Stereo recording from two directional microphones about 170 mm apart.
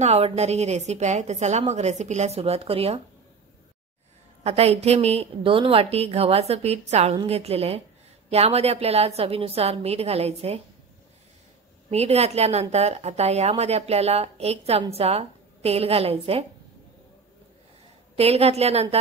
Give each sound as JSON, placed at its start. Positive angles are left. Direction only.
{"t": 0.0, "sound": "a woman's voice", "side_deg": -40}
{"t": 4.4, "sound": "a woman's voice", "side_deg": -35}
{"t": 11.9, "sound": "a woman's voice", "side_deg": -40}
{"t": 18.1, "sound": "a woman's voice", "side_deg": -35}